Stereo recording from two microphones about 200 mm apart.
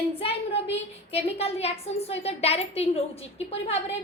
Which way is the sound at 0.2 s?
30° left (ahead or behind).